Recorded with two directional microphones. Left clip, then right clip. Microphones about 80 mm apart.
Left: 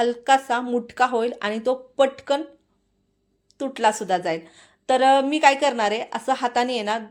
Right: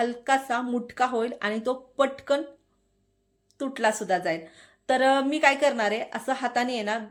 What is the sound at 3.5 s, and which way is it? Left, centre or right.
A woman's voice, left.